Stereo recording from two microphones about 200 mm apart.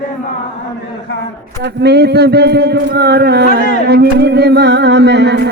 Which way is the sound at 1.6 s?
55° right (ahead or behind).